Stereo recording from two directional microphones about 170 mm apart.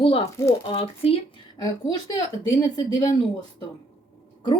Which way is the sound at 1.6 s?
20° left (ahead or behind).